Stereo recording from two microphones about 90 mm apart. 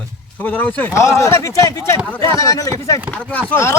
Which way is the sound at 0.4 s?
20° left (ahead or behind).